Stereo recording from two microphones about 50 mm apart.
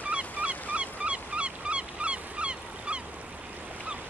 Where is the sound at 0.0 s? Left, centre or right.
Right.